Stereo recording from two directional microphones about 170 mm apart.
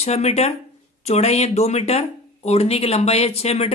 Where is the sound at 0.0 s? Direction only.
40° left (ahead or behind).